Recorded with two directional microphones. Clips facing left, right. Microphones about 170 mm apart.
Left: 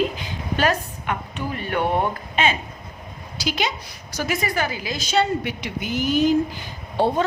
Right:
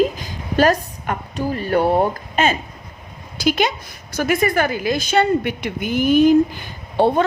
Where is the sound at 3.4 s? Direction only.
50° right (ahead or behind).